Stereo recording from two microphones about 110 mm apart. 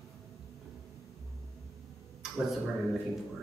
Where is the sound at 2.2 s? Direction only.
5° right (ahead or behind).